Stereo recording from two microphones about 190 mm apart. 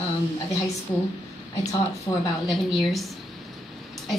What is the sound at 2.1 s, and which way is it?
Speech, 20° left (ahead or behind).